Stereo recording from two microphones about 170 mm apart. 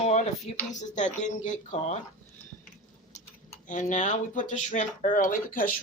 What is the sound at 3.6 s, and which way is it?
Speech, 45° left (ahead or behind).